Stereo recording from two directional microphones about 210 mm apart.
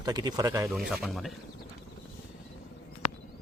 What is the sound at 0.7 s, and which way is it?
Speech, centre (ahead or behind).